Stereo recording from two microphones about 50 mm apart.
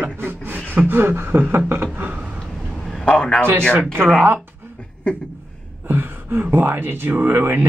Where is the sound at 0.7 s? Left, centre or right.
Right.